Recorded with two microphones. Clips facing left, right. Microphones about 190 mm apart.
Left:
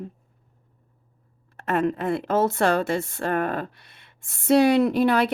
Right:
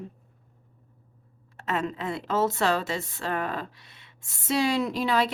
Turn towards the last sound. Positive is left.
turn(degrees=60)  # may be behind; listen again after turning